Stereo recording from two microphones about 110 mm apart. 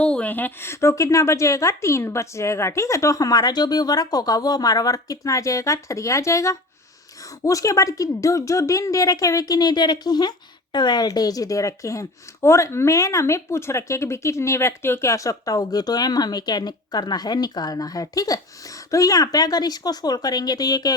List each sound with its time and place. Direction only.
0.0 s a woman's voice: 10° left (ahead or behind); by 20.9 s 35° left (ahead or behind)